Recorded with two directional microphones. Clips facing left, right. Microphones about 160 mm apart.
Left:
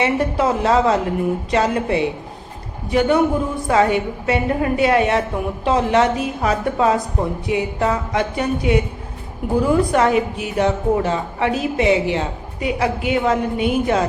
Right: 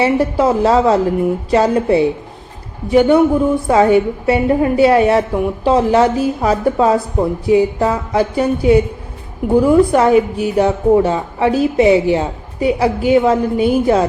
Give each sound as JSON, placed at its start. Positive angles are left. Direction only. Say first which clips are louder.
{"t": 0.0, "sound": "a woman's voice", "louder": "right 5 dB", "side_deg": -30}